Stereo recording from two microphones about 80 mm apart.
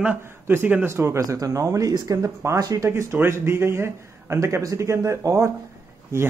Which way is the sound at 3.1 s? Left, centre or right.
Right.